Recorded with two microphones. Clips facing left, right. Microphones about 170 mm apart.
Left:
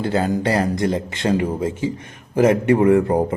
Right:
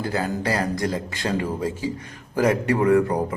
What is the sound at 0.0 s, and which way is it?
Speech, 25° left (ahead or behind).